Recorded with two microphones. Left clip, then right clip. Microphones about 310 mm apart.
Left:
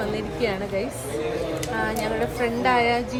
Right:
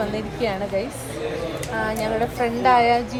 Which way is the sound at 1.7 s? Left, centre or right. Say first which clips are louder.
Right 3 dB; centre.